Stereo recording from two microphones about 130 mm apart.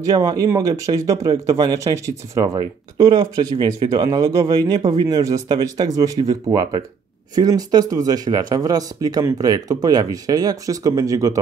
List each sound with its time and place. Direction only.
0.0 s speech: 30° right (ahead or behind)